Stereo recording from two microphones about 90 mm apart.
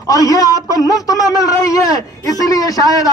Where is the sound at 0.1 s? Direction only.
40° left (ahead or behind).